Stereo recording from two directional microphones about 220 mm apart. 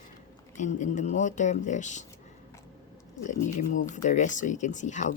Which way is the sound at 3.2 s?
35° left (ahead or behind).